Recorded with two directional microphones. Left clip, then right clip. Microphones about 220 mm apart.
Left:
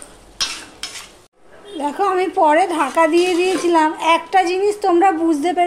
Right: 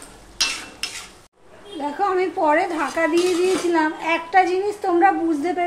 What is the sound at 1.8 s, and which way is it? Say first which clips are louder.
A woman's voice: left 3 dB; 40° left (ahead or behind).